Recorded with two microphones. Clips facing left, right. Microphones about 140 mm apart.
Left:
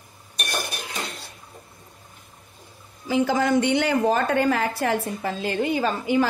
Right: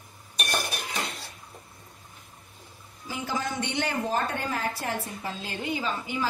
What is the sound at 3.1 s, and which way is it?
A woman's voice, 90° left.